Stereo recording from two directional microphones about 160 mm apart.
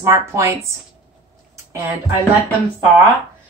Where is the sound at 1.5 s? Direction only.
20° right (ahead or behind).